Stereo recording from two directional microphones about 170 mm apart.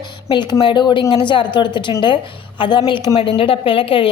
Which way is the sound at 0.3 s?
25° left (ahead or behind).